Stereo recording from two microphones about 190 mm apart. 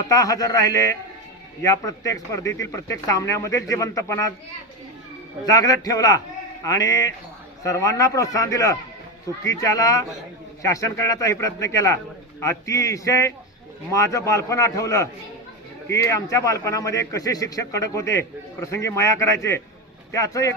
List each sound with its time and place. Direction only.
0.1 s a man's voice: 20° left (ahead or behind)
5.5 s a man's voice: 20° left (ahead or behind)
16.0 s a man's voice: 15° left (ahead or behind)